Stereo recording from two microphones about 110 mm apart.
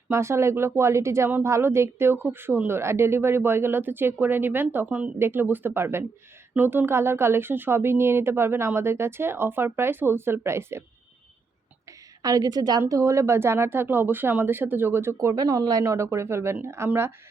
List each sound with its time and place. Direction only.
0.1 s speech: 25° right (ahead or behind)
12.2 s a woman's voice: 35° right (ahead or behind)